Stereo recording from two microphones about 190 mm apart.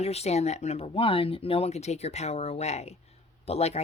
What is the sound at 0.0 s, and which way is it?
Speech, 35° left (ahead or behind).